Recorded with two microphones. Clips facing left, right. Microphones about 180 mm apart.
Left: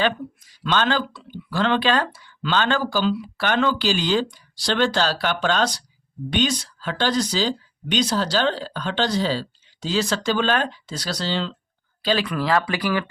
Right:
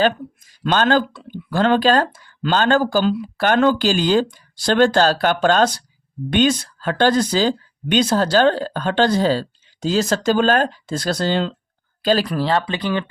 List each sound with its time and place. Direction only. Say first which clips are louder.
0.6 s speech: right 5 dB; 45° right (ahead or behind)
12.0 s speech: right 4 dB; 40° right (ahead or behind); by 13.1 s 25° right (ahead or behind)